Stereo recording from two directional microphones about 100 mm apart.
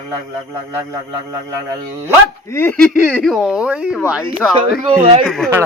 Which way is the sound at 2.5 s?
25° left (ahead or behind).